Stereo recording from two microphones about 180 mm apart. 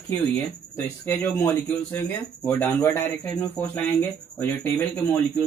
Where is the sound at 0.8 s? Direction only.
10° left (ahead or behind).